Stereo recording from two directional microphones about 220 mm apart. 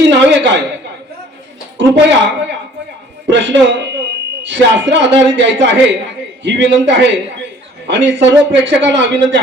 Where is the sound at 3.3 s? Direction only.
55° right (ahead or behind).